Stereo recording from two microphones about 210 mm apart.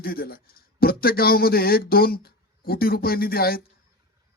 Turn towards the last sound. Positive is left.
turn(degrees=45)  # may be behind; listen again after turning